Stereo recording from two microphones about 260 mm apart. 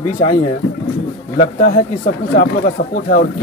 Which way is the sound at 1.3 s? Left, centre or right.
Left.